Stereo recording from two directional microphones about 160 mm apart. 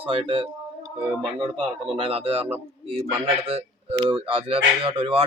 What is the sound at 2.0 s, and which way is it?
Speech, 35° right (ahead or behind).